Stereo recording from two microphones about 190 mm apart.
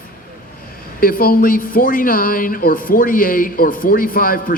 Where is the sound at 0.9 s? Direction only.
50° left (ahead or behind).